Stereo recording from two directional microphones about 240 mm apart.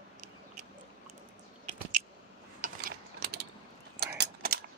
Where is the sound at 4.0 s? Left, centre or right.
Right.